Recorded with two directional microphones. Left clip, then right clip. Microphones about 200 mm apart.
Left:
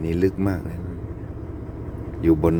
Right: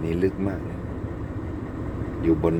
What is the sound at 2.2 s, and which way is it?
Speech, 25° left (ahead or behind).